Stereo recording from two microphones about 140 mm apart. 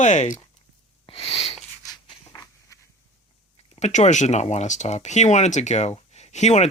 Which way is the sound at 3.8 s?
55° left (ahead or behind).